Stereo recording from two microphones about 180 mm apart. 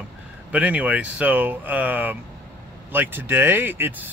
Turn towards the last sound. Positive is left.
turn(degrees=-10)  # may be behind; listen again after turning